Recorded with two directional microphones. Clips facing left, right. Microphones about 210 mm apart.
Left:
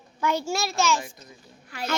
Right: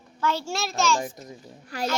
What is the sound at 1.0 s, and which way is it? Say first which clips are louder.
Speech: right 8 dB; 40° right (ahead or behind).